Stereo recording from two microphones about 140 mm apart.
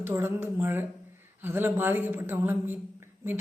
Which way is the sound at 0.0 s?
15° right (ahead or behind).